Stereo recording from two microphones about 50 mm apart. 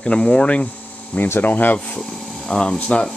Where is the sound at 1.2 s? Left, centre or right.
Left.